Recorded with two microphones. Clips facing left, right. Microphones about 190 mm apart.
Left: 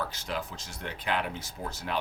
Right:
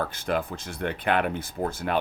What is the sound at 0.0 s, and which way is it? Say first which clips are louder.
Speech: right 7 dB; 55° right (ahead or behind).